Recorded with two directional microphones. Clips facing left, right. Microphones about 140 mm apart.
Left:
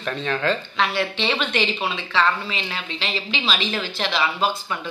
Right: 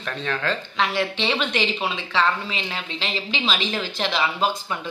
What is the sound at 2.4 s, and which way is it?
A woman's voice, 30° right (ahead or behind).